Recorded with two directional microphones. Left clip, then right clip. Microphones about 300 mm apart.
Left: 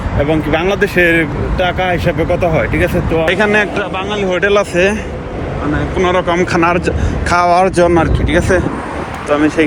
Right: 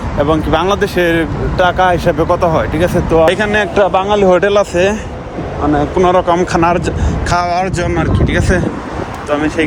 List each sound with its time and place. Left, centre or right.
0.3 s speech: centre
3.8 s speech: right
6.0 s speech: centre